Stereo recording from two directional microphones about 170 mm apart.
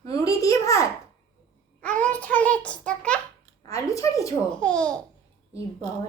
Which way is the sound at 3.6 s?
20° left (ahead or behind).